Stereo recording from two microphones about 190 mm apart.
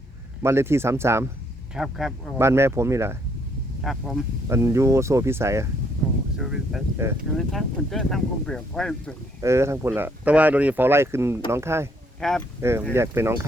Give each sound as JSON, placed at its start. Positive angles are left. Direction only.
{"t": 0.4, "sound": "speech", "side_deg": -15}
{"t": 1.7, "sound": "speech", "side_deg": 0}
{"t": 2.4, "sound": "speech", "side_deg": -15}
{"t": 3.8, "sound": "speech", "side_deg": 0}
{"t": 4.4, "sound": "speech", "side_deg": -15}
{"t": 6.3, "sound": "speech", "side_deg": -5}
{"t": 6.9, "sound": "speech", "side_deg": -15}
{"t": 7.3, "sound": "speech", "side_deg": 0}
{"t": 9.4, "sound": "speech", "side_deg": -15}
{"t": 12.2, "sound": "speech", "side_deg": 0}
{"t": 12.9, "sound": "speech", "side_deg": -15}